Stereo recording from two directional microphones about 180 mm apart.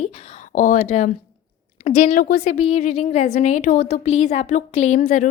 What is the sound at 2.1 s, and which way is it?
Speech, 55° left (ahead or behind).